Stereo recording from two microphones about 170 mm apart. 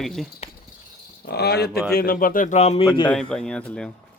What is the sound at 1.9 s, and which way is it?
A man's voice, 60° left (ahead or behind).